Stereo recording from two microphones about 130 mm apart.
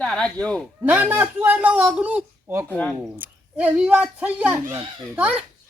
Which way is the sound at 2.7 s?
10° left (ahead or behind).